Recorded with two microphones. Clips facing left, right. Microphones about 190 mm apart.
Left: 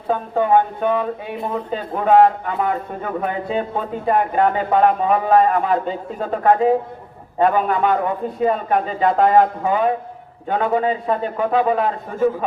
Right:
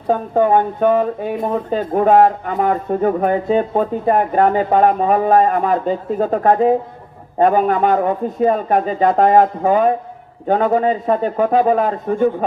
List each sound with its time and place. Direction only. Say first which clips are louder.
0.1 s speech: right 3 dB; 45° right (ahead or behind)